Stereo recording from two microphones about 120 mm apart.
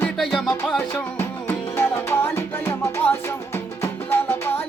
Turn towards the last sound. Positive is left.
turn(degrees=20)  # may be behind; listen again after turning